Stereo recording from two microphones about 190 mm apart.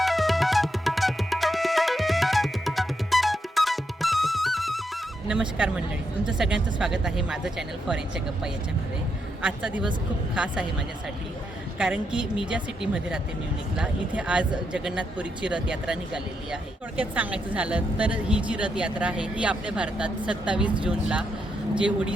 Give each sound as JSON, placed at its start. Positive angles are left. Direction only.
{"t": 0.0, "sound": "music", "side_deg": 0}
{"t": 5.3, "sound": "speech", "side_deg": -5}
{"t": 9.4, "sound": "speech", "side_deg": -5}
{"t": 11.8, "sound": "speech", "side_deg": -5}